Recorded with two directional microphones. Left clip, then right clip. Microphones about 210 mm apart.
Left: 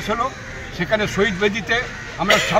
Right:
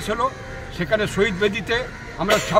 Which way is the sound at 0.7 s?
25° right (ahead or behind).